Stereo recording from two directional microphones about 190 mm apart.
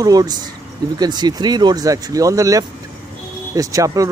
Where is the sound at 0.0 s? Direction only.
20° right (ahead or behind).